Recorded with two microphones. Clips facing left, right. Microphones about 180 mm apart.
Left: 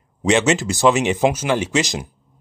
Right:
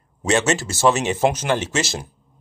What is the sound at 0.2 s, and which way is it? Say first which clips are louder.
Speech: left 3 dB; 15° left (ahead or behind).